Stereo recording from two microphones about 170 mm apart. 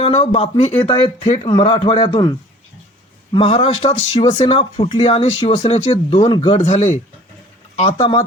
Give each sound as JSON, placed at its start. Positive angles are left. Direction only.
{"t": 0.0, "sound": "speech", "side_deg": 40}
{"t": 3.3, "sound": "speech", "side_deg": 35}
{"t": 6.6, "sound": "speech", "side_deg": 40}
{"t": 7.9, "sound": "speech", "side_deg": 30}